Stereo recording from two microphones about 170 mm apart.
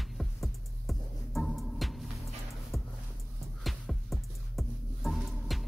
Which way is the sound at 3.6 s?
Centre (ahead or behind).